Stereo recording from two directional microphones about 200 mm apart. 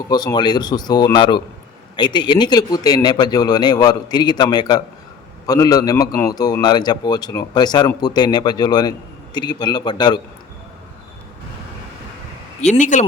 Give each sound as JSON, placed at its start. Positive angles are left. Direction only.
{"t": 0.1, "sound": "a man's voice", "side_deg": 20}
{"t": 12.6, "sound": "speech", "side_deg": 35}